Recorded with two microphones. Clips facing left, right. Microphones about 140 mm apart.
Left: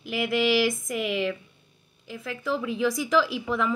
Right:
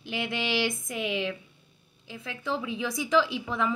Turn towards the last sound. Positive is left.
turn(degrees=-20)  # may be behind; listen again after turning